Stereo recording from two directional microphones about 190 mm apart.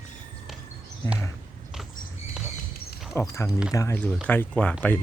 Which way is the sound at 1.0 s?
20° left (ahead or behind).